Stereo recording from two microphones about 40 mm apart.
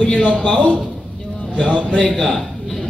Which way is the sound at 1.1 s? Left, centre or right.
Centre.